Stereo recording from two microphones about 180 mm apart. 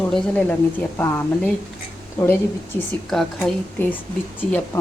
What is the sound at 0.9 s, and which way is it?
A woman's voice, 15° left (ahead or behind).